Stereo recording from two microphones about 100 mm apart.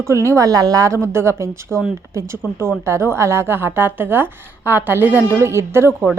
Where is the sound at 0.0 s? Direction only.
30° right (ahead or behind).